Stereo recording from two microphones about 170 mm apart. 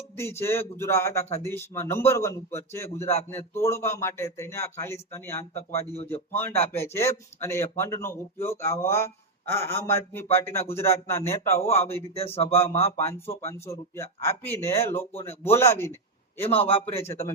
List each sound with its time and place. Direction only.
0.2 s a man's voice: 15° left (ahead or behind)
12.1 s speech: 35° left (ahead or behind)
13.5 s a man's voice: 15° left (ahead or behind)
16.5 s speech: 35° left (ahead or behind)